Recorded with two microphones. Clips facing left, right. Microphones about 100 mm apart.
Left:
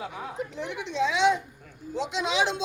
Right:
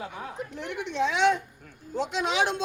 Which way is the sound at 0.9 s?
50° right (ahead or behind).